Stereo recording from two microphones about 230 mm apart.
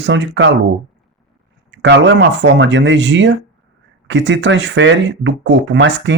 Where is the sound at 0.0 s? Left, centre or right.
Right.